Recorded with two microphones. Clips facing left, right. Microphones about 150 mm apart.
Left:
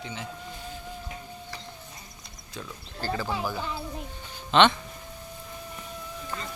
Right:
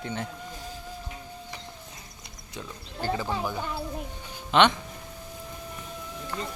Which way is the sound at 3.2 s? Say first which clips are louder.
Even; 5° left (ahead or behind).